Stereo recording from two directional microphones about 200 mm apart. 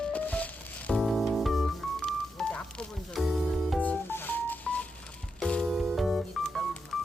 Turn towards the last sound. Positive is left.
turn(degrees=0)  # may be behind; listen again after turning